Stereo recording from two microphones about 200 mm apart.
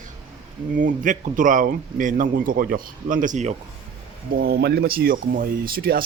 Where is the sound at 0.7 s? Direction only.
40° right (ahead or behind).